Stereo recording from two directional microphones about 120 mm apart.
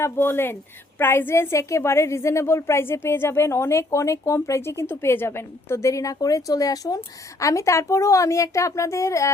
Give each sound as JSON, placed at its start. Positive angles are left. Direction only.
{"t": 0.0, "sound": "a woman's voice", "side_deg": 20}